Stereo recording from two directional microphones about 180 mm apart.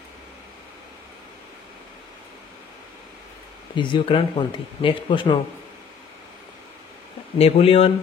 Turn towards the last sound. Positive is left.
turn(degrees=35)  # may be behind; listen again after turning